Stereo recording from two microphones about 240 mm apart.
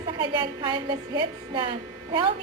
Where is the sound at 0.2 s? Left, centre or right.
Centre.